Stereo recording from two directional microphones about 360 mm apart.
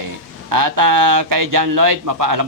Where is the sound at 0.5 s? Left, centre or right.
Right.